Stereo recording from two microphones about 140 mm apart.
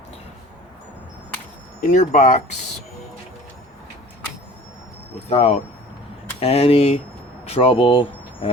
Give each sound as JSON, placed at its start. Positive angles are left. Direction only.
{"t": 1.8, "sound": "speech", "side_deg": 65}
{"t": 5.3, "sound": "speech", "side_deg": 45}